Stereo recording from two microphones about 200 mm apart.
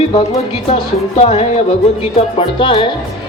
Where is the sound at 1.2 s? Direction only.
30° left (ahead or behind).